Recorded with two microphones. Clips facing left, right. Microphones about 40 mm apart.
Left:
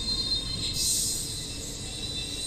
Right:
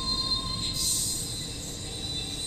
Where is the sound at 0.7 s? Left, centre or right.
Right.